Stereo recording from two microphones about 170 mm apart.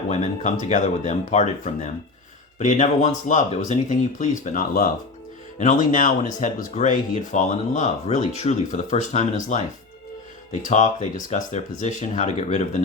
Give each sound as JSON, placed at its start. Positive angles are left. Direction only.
{"t": 0.1, "sound": "speech", "side_deg": 45}